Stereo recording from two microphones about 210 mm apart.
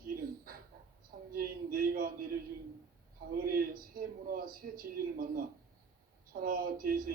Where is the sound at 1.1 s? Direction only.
45° right (ahead or behind).